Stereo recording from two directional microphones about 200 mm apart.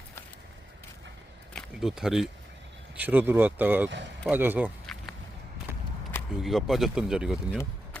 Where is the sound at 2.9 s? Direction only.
10° right (ahead or behind).